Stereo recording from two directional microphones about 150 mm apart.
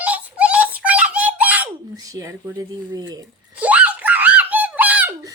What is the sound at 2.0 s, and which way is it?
Speech, 25° right (ahead or behind).